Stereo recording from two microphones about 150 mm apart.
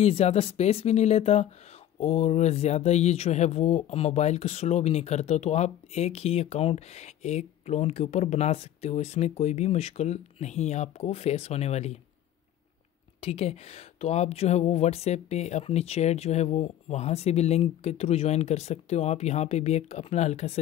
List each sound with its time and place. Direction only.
0.0 s speech: 45° left (ahead or behind)
13.2 s speech: 45° left (ahead or behind)